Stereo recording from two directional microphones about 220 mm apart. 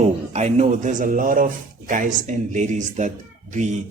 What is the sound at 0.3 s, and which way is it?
Speech, 30° right (ahead or behind).